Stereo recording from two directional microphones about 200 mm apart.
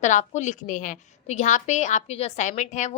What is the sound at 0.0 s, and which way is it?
A woman's voice, 35° left (ahead or behind).